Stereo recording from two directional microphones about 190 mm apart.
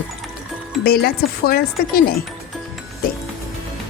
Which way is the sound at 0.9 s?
55° left (ahead or behind).